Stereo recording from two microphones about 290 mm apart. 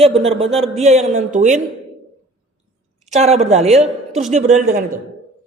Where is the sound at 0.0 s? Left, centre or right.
Centre.